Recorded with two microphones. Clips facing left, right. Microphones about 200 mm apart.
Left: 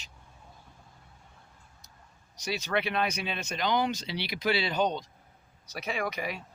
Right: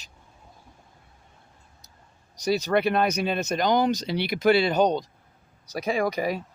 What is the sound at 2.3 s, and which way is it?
Speech, 40° right (ahead or behind).